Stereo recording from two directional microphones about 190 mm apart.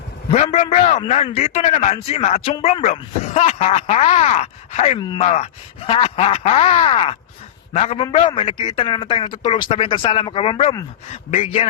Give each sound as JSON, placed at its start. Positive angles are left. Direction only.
{"t": 0.3, "sound": "a man's voice", "side_deg": 30}